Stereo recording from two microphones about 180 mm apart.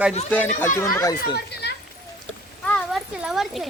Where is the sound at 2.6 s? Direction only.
5° left (ahead or behind).